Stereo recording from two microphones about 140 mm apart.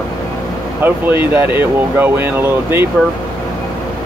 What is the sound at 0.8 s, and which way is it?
Speech, 15° right (ahead or behind).